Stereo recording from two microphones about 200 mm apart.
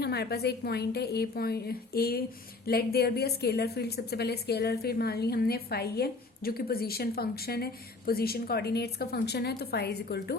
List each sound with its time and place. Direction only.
0.0 s a woman's voice: 55° left (ahead or behind)